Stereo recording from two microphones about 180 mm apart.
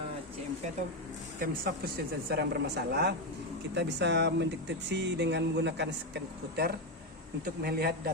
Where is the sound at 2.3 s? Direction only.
65° right (ahead or behind).